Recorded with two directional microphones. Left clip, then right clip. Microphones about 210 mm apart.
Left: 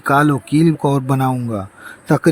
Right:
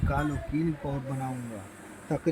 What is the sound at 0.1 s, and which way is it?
Speech, 50° left (ahead or behind).